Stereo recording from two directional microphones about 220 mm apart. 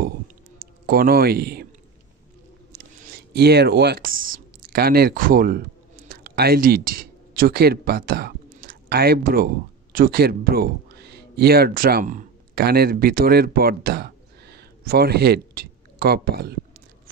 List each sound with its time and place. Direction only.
0.6 s speech: 40° right (ahead or behind)
2.7 s speech: 45° right (ahead or behind)